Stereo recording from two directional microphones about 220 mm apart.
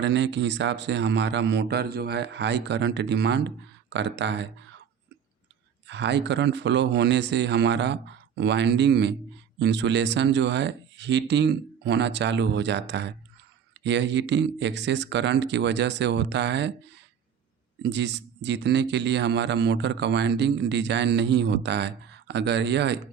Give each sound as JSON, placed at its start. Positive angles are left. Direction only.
{"t": 0.0, "sound": "speech", "side_deg": -55}
{"t": 5.9, "sound": "speech", "side_deg": -50}
{"t": 17.8, "sound": "speech", "side_deg": -50}